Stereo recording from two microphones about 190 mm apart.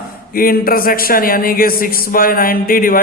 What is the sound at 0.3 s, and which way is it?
A man's voice, 50° left (ahead or behind).